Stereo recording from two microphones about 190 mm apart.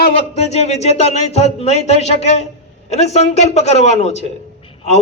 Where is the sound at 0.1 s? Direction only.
35° left (ahead or behind).